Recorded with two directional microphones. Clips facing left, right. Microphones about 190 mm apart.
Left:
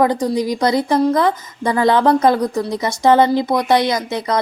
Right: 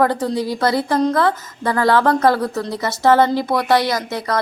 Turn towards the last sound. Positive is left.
turn(degrees=20)  # may be behind; listen again after turning